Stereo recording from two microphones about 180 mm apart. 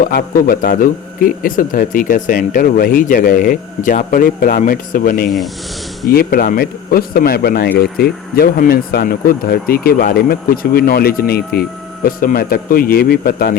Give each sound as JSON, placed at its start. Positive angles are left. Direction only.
{"t": 0.0, "sound": "speech", "side_deg": 50}